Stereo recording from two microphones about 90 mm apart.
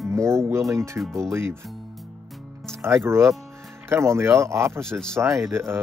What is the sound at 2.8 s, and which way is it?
Speech, 30° right (ahead or behind).